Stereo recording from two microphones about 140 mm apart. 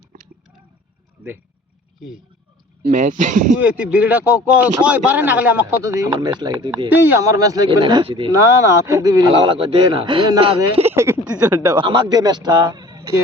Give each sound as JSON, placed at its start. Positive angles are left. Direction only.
{"t": 2.8, "sound": "speech", "side_deg": -70}
{"t": 3.9, "sound": "a man's voice", "side_deg": -10}
{"t": 8.4, "sound": "speech", "side_deg": -20}
{"t": 10.8, "sound": "speech", "side_deg": -20}
{"t": 11.7, "sound": "a man's voice", "side_deg": -35}